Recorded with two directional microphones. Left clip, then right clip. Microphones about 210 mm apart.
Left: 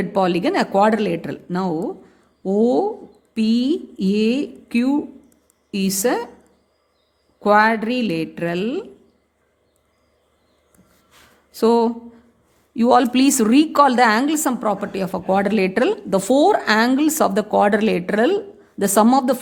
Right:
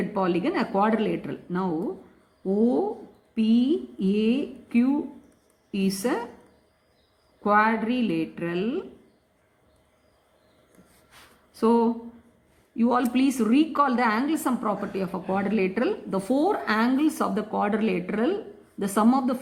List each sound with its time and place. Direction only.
0.1 s a woman's voice: 45° left (ahead or behind)
7.4 s a woman's voice: 45° left (ahead or behind)
11.5 s a woman's voice: 45° left (ahead or behind)